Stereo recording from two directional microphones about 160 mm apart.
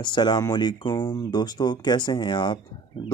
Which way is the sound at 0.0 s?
30° left (ahead or behind).